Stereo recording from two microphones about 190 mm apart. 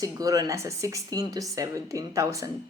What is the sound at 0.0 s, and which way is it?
Speech, 20° right (ahead or behind).